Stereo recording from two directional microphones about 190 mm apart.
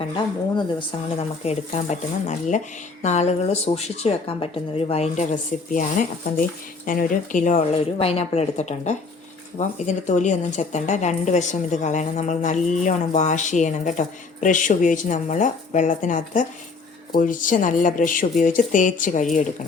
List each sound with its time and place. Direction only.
1.5 s a woman's voice: 35° left (ahead or behind)